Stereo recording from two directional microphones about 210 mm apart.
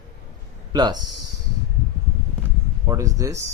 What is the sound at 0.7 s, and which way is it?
Speech, 20° right (ahead or behind).